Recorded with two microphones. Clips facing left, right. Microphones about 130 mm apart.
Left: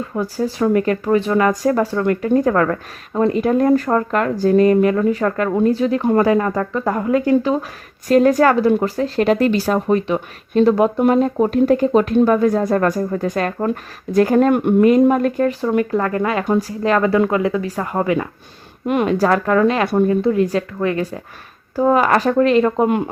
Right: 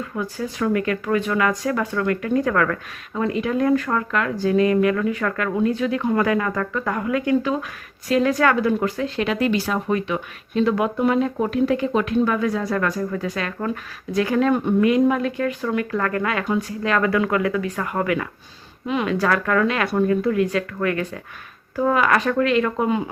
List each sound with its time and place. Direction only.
0.0 s speech: 30° left (ahead or behind)
15.6 s speech: 30° left (ahead or behind)
19.0 s speech: 35° left (ahead or behind)